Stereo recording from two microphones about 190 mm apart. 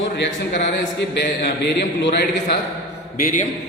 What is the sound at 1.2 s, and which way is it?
A man's voice, 60° left (ahead or behind).